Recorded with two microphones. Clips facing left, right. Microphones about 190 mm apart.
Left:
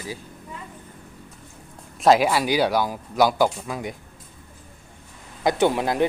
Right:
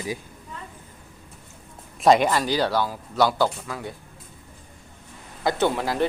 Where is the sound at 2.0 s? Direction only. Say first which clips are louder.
Even; 5° left (ahead or behind).